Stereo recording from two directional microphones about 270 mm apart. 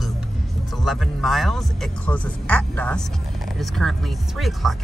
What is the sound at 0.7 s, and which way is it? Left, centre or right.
Speech, centre.